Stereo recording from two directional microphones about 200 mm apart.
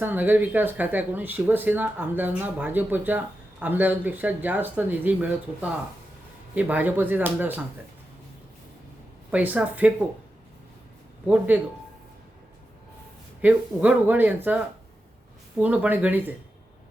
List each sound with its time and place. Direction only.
0.0 s speech: 10° right (ahead or behind)
9.3 s speech: 5° right (ahead or behind)
11.3 s speech: 5° right (ahead or behind)
13.4 s speech: 5° right (ahead or behind)
15.6 s speech: 5° right (ahead or behind)